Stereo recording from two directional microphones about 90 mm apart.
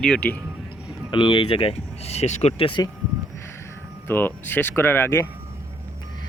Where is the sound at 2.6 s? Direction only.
75° left (ahead or behind).